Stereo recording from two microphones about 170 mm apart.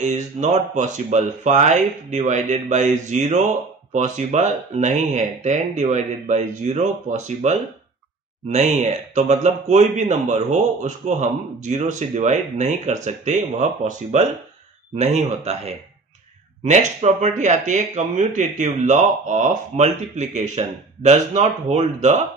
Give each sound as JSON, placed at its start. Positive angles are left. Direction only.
{"t": 0.0, "sound": "speech", "side_deg": -45}